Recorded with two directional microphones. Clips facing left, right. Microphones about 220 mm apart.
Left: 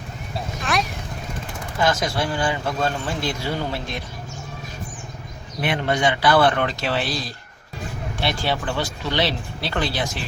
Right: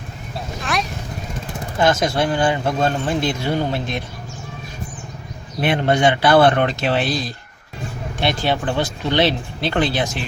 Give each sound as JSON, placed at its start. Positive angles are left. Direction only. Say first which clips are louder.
{"t": 0.6, "sound": "vehicle", "louder": "even", "side_deg": 0}
{"t": 1.8, "sound": "speech", "louder": "right 4 dB", "side_deg": -25}
{"t": 5.9, "sound": "speech", "louder": "right 4 dB", "side_deg": -25}